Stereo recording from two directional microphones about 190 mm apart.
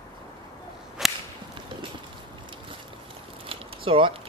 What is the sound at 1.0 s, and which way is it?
Whip, centre (ahead or behind).